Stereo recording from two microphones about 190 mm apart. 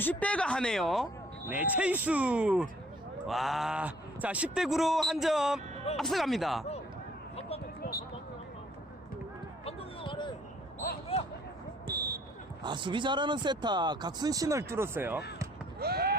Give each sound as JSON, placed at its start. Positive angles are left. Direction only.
{"t": 0.0, "sound": "speech", "side_deg": 10}
{"t": 7.8, "sound": "a sound", "side_deg": 50}
{"t": 9.6, "sound": "a sound", "side_deg": 25}
{"t": 11.9, "sound": "basketball bounce", "side_deg": -55}
{"t": 12.6, "sound": "speech", "side_deg": -25}
{"t": 15.8, "sound": "fireworks", "side_deg": -55}